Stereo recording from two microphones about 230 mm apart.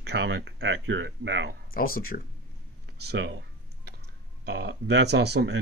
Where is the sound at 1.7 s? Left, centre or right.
Left.